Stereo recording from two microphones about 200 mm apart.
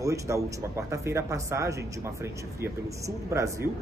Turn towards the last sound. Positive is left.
turn(degrees=-15)  # may be behind; listen again after turning